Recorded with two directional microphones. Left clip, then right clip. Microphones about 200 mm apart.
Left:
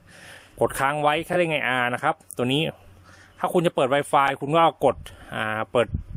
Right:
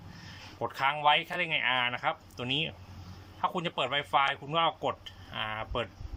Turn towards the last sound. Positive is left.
turn(degrees=60)  # may be behind; listen again after turning